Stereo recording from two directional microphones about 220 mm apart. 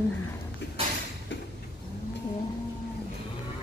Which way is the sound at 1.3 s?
55° left (ahead or behind).